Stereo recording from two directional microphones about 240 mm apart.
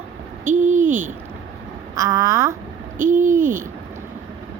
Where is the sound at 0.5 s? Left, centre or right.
Right.